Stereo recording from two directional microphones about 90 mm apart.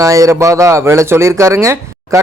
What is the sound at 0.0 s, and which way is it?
A man's voice, 40° right (ahead or behind).